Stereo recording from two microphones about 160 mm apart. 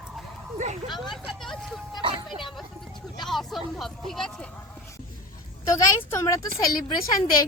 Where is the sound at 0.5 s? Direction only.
45° right (ahead or behind).